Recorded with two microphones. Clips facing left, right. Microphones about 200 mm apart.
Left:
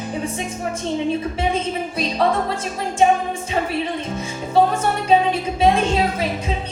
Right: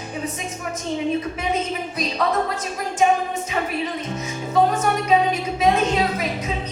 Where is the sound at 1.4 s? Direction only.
30° left (ahead or behind).